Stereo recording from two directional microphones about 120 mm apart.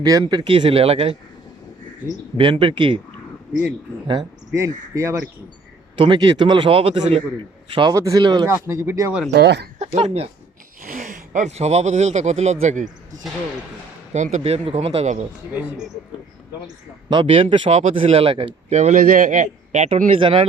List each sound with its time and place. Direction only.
0.0 s a man's voice: 35° right (ahead or behind); by 1.1 s 55° right (ahead or behind)
2.4 s a man's voice: 45° right (ahead or behind)
4.0 s speech: 40° right (ahead or behind)
4.5 s speech: 25° right (ahead or behind)
6.0 s a man's voice: 40° right (ahead or behind)
7.9 s speech: 30° right (ahead or behind)
8.4 s speech: 25° right (ahead or behind)
9.9 s a man's voice: 50° right (ahead or behind)
11.0 s speech: 80° right
14.1 s speech: 80° right
17.1 s a man's voice: 45° right (ahead or behind)
17.7 s a man's voice: 60° right (ahead or behind)
18.7 s speech: 75° right (ahead or behind); by 20.4 s 45° right (ahead or behind)